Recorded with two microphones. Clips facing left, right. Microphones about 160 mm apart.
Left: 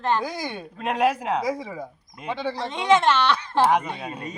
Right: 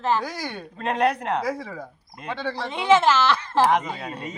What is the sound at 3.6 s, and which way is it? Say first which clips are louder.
Speech: even; 10° left (ahead or behind).